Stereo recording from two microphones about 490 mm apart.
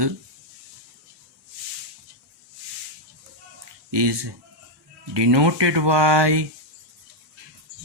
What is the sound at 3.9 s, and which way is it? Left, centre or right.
Speech, right.